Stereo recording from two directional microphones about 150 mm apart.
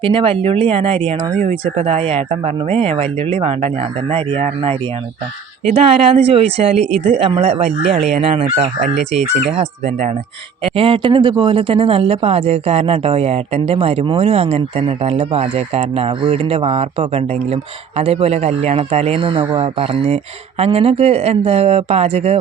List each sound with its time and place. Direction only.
0.0 s speech: 35° right (ahead or behind)